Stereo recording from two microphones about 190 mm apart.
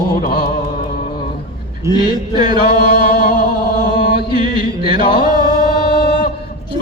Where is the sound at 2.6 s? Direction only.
55° left (ahead or behind).